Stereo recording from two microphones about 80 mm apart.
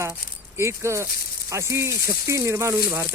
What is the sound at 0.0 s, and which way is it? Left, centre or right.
Speech, right.